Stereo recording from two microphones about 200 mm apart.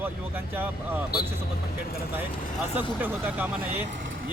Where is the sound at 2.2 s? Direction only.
10° right (ahead or behind).